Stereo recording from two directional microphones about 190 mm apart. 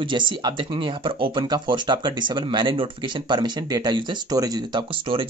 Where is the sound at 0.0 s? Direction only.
25° right (ahead or behind).